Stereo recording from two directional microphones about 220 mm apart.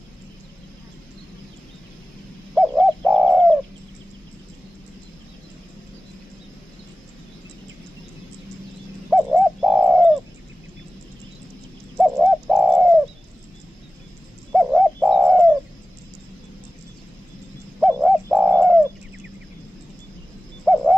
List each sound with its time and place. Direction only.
2.5 s bird: centre (ahead or behind)
9.1 s bird: centre (ahead or behind)
12.0 s bird: 5° right (ahead or behind)
14.5 s bird: 5° right (ahead or behind)
18.0 s bird: 5° right (ahead or behind)
20.6 s a sound: centre (ahead or behind)